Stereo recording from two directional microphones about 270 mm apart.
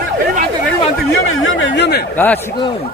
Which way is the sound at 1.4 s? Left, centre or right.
Left.